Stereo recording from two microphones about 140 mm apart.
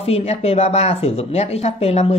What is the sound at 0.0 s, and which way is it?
Speech, 45° left (ahead or behind).